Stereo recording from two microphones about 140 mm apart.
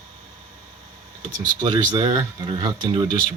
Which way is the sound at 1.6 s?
35° right (ahead or behind).